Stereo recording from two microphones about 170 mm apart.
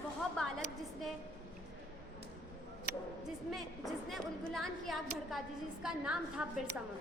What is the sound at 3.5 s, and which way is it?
A woman's voice, centre (ahead or behind).